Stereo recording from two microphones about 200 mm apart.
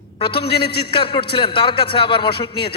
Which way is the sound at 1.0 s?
25° left (ahead or behind).